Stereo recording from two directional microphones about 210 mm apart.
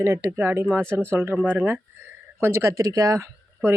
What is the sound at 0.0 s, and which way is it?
Speech, 10° right (ahead or behind).